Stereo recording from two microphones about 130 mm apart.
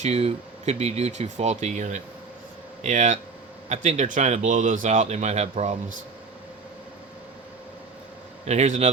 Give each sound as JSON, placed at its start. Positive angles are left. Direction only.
{"t": 0.0, "sound": "speech", "side_deg": -55}
{"t": 8.4, "sound": "speech", "side_deg": -60}